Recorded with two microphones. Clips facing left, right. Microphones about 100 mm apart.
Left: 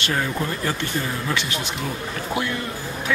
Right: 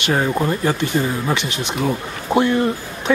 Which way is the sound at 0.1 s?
30° right (ahead or behind).